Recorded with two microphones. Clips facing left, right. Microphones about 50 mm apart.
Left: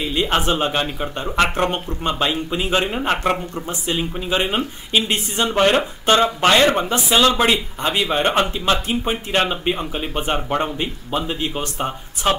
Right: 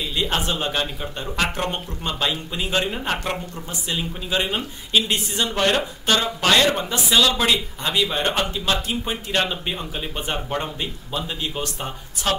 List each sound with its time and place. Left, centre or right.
0.0 s speech: left